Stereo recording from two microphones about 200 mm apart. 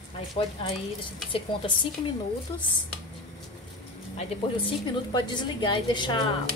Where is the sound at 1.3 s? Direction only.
25° left (ahead or behind).